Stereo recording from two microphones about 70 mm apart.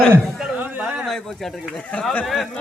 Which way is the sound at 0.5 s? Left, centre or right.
Right.